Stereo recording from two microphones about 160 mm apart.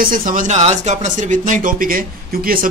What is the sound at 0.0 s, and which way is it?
Speech, 60° right (ahead or behind).